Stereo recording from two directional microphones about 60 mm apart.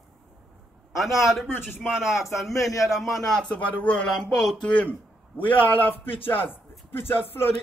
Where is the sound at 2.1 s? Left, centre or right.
Left.